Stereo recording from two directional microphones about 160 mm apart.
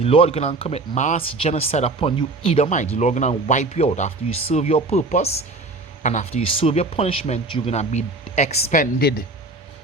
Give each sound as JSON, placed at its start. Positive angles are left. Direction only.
{"t": 0.0, "sound": "speech", "side_deg": 35}
{"t": 6.5, "sound": "speech", "side_deg": 35}
{"t": 8.8, "sound": "speech", "side_deg": 75}